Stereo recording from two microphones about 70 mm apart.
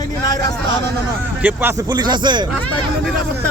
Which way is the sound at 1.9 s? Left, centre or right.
Right.